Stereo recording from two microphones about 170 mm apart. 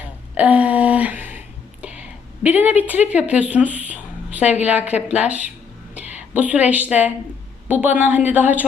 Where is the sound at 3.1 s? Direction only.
10° right (ahead or behind).